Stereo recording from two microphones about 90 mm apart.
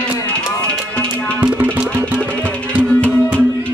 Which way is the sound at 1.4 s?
15° right (ahead or behind).